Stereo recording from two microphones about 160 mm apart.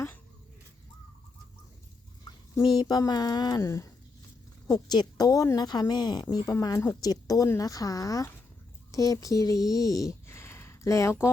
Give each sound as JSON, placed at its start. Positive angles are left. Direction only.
{"t": 2.6, "sound": "speech", "side_deg": 25}